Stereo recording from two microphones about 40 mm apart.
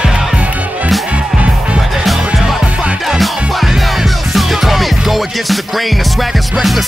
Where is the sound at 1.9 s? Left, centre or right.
Centre.